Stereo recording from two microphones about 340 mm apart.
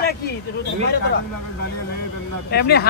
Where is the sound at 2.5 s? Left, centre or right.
Left.